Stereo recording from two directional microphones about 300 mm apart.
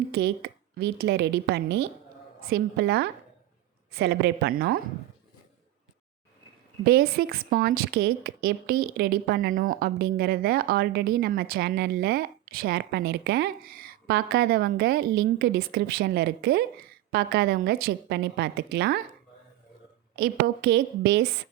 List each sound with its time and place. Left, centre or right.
0.1 s a woman's voice: right
6.8 s a woman's voice: right
20.1 s a woman's voice: right